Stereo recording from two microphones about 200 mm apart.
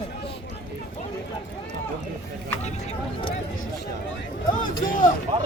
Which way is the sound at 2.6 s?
35° left (ahead or behind).